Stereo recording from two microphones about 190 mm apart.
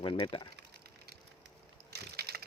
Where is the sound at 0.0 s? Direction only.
25° left (ahead or behind).